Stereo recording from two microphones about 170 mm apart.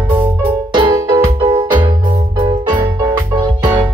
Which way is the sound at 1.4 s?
35° right (ahead or behind).